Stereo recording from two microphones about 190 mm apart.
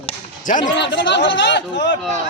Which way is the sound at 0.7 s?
70° left (ahead or behind).